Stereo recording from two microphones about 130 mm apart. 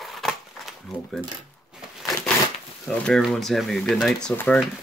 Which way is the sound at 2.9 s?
10° left (ahead or behind).